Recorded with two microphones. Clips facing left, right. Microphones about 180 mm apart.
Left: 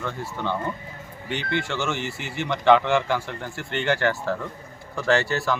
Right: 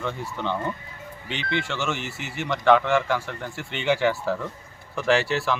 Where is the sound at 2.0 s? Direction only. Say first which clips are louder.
Left 3 dB; 55° left (ahead or behind).